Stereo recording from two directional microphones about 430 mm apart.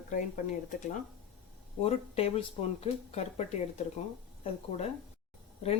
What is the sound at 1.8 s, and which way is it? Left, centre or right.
Speech, centre.